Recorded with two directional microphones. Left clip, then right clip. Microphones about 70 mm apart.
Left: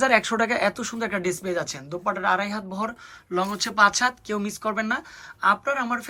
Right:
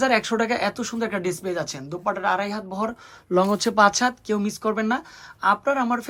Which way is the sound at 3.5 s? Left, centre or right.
Right.